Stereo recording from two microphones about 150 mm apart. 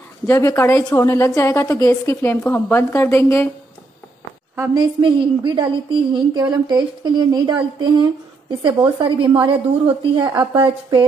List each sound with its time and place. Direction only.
0.3 s a woman's voice: 20° left (ahead or behind)
4.7 s a woman's voice: 30° right (ahead or behind)